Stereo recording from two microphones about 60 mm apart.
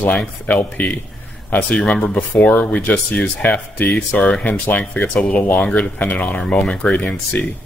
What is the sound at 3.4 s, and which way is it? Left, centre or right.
Speech, left.